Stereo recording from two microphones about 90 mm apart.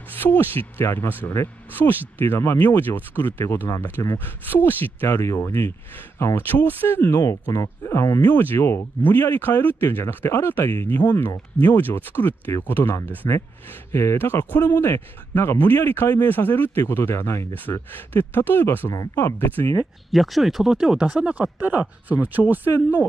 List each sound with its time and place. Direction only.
0.1 s speech: 20° left (ahead or behind)
8.2 s speech: 20° left (ahead or behind)
18.9 s speech: 40° left (ahead or behind)
19.4 s speech: 25° left (ahead or behind)
20.1 s speech: centre (ahead or behind); by 22.6 s 20° right (ahead or behind)